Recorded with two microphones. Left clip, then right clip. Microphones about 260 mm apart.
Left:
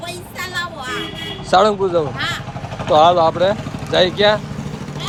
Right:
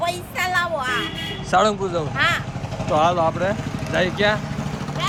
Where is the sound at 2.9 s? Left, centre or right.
Left.